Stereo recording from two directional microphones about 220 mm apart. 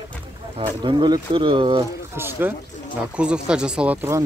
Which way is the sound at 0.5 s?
25° right (ahead or behind).